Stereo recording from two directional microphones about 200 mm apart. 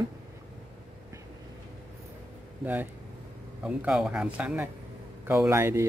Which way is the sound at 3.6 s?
5° right (ahead or behind).